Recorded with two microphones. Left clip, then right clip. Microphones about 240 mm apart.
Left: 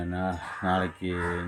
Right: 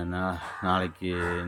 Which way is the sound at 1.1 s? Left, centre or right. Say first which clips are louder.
Right 3 dB; right.